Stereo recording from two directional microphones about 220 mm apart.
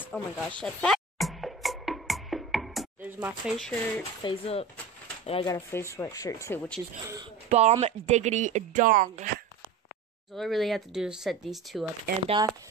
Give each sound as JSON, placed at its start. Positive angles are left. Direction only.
{"t": 0.0, "sound": "music", "side_deg": 5}
{"t": 3.2, "sound": "speech", "side_deg": -5}
{"t": 4.2, "sound": "speech", "side_deg": 25}
{"t": 7.4, "sound": "speech", "side_deg": -30}
{"t": 10.3, "sound": "speech", "side_deg": 0}
{"t": 12.3, "sound": "speech", "side_deg": -20}